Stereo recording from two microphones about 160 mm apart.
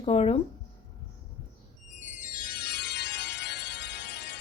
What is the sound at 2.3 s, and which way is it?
Music, 65° left (ahead or behind).